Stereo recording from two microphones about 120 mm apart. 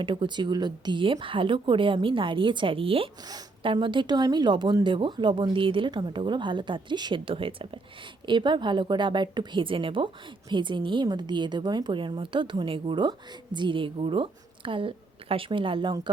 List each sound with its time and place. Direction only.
0.0 s a woman's voice: 45° right (ahead or behind)